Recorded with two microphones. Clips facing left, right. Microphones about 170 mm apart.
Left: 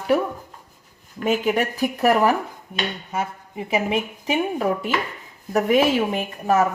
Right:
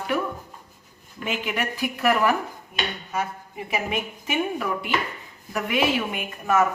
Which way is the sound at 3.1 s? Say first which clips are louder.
Left 1 dB; 30° left (ahead or behind).